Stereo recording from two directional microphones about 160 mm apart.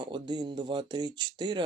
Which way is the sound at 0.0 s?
30° right (ahead or behind).